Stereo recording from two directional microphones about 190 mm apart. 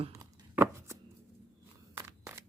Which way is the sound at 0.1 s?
15° right (ahead or behind).